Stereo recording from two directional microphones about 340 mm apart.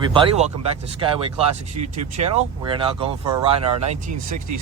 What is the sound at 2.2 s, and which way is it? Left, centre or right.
Speech, centre.